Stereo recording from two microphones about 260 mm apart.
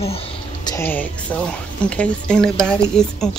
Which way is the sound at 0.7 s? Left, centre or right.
Centre.